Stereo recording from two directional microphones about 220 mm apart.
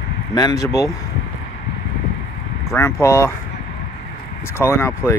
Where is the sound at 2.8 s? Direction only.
10° left (ahead or behind).